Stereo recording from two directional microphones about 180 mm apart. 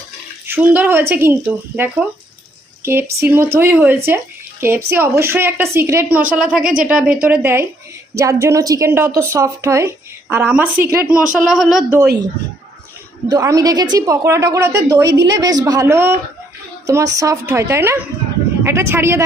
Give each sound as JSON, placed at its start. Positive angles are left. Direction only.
{"t": 0.4, "sound": "a woman's voice", "side_deg": -10}
{"t": 11.4, "sound": "speech", "side_deg": 0}
{"t": 13.2, "sound": "a woman's voice", "side_deg": -20}